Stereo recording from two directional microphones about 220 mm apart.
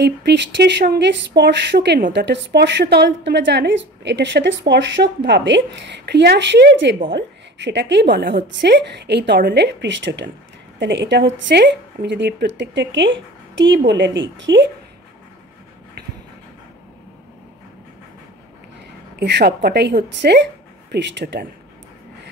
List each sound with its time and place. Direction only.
0.0 s a woman's voice: 50° right (ahead or behind)
19.1 s a woman's voice: 50° right (ahead or behind)